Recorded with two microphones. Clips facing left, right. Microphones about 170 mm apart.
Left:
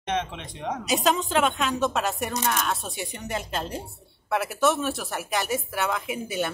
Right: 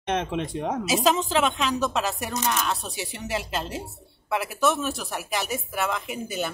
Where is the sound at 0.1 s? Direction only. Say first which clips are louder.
Right 3 dB; 50° right (ahead or behind).